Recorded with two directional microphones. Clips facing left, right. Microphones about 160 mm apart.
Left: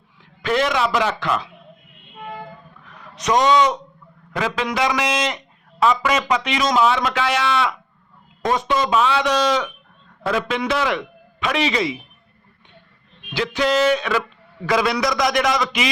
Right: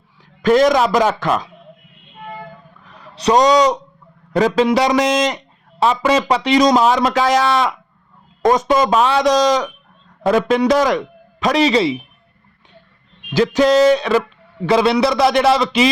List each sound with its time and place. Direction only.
0.4 s a man's voice: 40° right (ahead or behind)
2.9 s a man's voice: 30° right (ahead or behind)
13.3 s a man's voice: 40° right (ahead or behind)